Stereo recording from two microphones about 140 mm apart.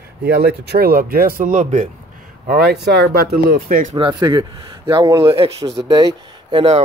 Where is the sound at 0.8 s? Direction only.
90° right; by 1.9 s 60° right (ahead or behind).